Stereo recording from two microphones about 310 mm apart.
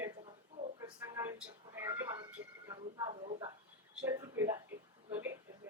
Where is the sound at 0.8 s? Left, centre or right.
Centre.